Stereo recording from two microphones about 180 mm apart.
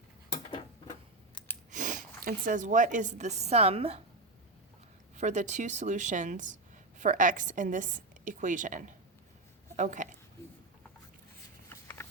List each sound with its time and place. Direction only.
1.7 s a woman's voice: 45° right (ahead or behind)
5.1 s a woman's voice: 40° right (ahead or behind)
11.7 s a sound: 15° left (ahead or behind)